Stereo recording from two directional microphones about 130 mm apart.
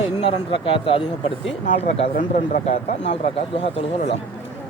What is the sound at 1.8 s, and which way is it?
Speech, 55° left (ahead or behind).